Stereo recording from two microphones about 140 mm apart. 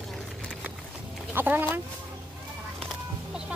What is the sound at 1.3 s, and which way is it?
Speech, 15° right (ahead or behind).